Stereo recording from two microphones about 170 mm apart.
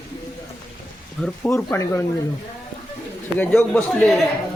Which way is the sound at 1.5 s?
20° left (ahead or behind).